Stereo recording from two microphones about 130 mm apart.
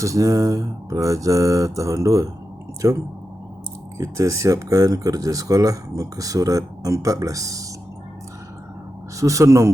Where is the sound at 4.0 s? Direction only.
25° right (ahead or behind).